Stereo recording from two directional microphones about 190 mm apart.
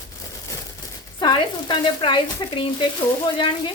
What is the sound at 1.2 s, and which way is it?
Speech, 25° left (ahead or behind).